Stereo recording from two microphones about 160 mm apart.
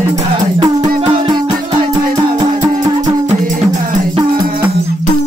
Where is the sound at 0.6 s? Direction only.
25° right (ahead or behind).